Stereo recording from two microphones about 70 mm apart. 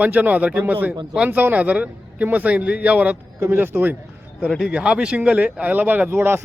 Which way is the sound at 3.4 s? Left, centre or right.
Right.